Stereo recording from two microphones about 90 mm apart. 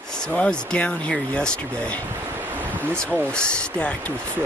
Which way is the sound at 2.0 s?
25° right (ahead or behind).